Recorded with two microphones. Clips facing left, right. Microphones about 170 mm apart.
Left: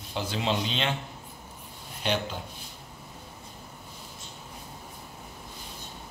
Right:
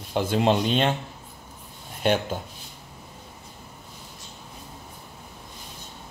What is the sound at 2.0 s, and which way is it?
Speech, 50° right (ahead or behind).